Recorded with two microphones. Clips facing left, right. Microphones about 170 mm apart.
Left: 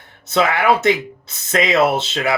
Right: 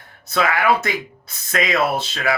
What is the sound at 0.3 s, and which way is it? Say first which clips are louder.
Speech: left 2 dB; 25° left (ahead or behind).